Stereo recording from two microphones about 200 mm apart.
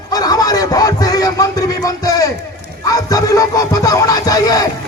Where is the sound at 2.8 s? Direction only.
15° left (ahead or behind).